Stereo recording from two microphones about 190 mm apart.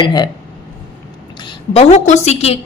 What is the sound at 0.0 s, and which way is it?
Speech, 25° left (ahead or behind).